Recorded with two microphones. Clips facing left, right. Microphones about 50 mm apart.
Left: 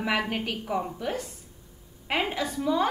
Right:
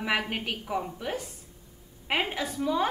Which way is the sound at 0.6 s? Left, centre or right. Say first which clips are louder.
Left 2 dB; centre.